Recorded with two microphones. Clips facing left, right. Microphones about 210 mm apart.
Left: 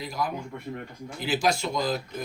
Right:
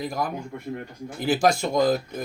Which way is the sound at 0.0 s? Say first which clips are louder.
Right 3 dB; 50° right (ahead or behind).